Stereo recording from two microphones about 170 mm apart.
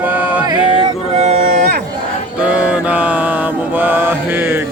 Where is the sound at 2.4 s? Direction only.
5° right (ahead or behind).